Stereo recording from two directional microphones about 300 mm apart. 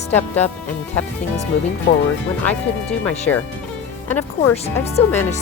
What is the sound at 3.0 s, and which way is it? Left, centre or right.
Speech, centre.